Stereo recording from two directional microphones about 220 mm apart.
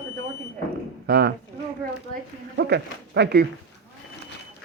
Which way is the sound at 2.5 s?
50° right (ahead or behind).